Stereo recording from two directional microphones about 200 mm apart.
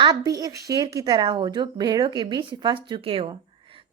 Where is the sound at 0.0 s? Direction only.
20° right (ahead or behind).